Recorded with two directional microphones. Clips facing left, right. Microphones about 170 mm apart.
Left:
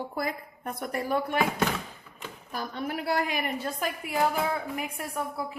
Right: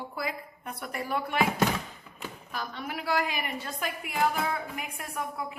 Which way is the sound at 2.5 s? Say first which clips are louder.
Left 4 dB; 45° left (ahead or behind).